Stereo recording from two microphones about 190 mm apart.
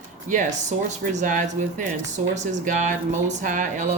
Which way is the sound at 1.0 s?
40° right (ahead or behind).